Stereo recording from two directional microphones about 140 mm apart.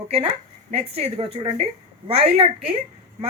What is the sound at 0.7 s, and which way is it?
Speech, 45° right (ahead or behind).